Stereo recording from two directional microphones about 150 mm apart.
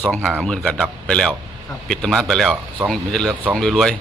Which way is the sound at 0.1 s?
Centre (ahead or behind).